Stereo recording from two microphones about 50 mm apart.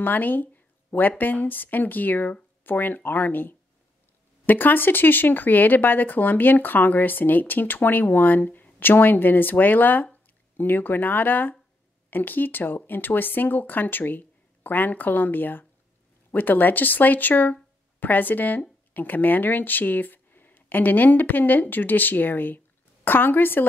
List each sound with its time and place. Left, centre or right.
0.0 s a woman's voice: left